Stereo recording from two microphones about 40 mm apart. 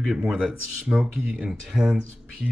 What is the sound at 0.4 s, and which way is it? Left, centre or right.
Speech, right.